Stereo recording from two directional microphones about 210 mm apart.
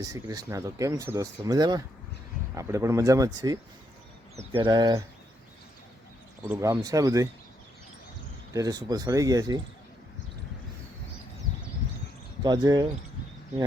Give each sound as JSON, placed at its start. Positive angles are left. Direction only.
{"t": 0.0, "sound": "speech", "side_deg": -15}
{"t": 6.4, "sound": "speech", "side_deg": -10}
{"t": 8.5, "sound": "speech", "side_deg": -15}
{"t": 12.4, "sound": "speech", "side_deg": -20}